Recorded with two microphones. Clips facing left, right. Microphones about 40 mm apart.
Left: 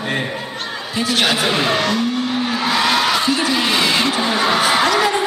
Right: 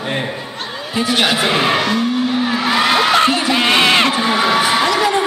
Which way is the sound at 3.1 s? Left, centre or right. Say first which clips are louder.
Right 5 dB; right.